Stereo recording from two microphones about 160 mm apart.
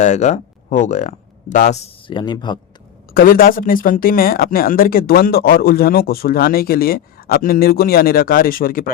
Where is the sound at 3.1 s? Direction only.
65° left (ahead or behind).